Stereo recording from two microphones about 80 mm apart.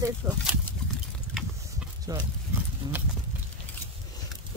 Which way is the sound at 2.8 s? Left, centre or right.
Right.